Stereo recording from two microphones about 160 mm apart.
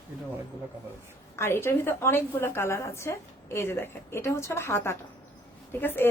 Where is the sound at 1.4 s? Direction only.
15° left (ahead or behind).